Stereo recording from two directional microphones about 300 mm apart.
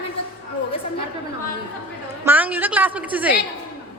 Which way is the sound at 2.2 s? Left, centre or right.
Centre.